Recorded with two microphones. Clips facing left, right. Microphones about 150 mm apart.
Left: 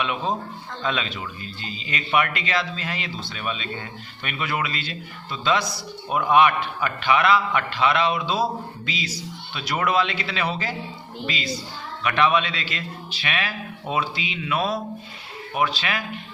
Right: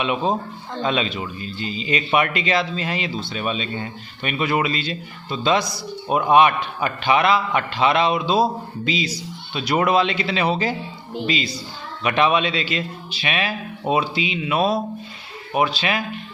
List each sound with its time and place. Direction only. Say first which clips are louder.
0.0 s a man's voice: right 4 dB; 20° right (ahead or behind)